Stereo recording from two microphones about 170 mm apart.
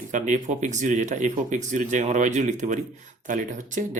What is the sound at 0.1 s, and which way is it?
Speech, 45° right (ahead or behind).